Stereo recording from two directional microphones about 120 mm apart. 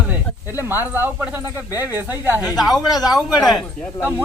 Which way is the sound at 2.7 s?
30° left (ahead or behind).